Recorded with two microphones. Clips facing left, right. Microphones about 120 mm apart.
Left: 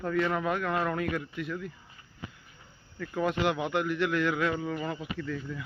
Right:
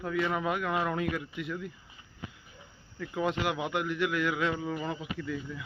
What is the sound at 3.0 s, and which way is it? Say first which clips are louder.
A man's voice: left 2 dB; 10° right (ahead or behind).